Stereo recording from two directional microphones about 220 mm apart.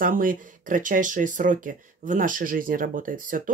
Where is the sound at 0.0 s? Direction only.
40° right (ahead or behind).